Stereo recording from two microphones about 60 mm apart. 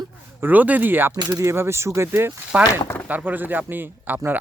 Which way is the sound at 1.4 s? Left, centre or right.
Right.